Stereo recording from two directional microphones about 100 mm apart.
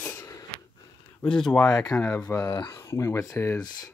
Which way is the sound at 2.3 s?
20° left (ahead or behind).